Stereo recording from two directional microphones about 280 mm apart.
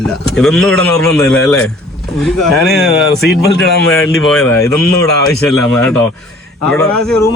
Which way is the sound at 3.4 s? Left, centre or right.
Left.